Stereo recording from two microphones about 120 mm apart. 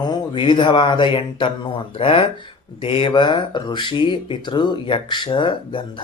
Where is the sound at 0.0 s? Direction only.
40° left (ahead or behind).